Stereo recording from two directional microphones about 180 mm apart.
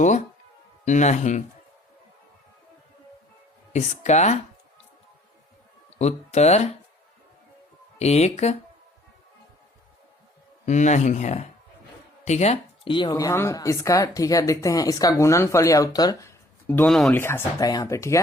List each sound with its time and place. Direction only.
0.9 s speech: 40° left (ahead or behind)
3.7 s speech: 40° left (ahead or behind)
6.0 s speech: 35° left (ahead or behind)
7.9 s speech: 35° left (ahead or behind)
10.7 s a woman's voice: 40° left (ahead or behind); by 18.2 s 15° left (ahead or behind)